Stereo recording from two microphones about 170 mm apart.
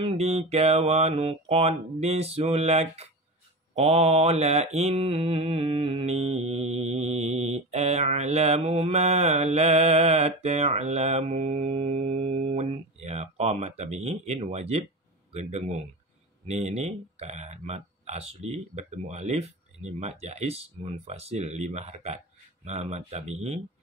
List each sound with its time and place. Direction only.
0.0 s mantra: 35° right (ahead or behind)